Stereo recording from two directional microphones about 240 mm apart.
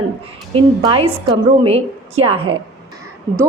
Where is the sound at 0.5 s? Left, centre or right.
Right.